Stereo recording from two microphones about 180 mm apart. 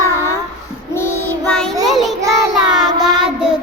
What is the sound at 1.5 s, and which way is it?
Child singing, 5° left (ahead or behind).